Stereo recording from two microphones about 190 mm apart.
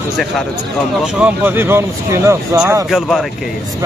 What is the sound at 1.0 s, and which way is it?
Speech, 10° right (ahead or behind).